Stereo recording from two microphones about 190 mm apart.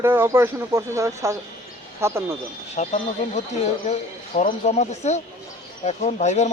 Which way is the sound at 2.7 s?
35° left (ahead or behind).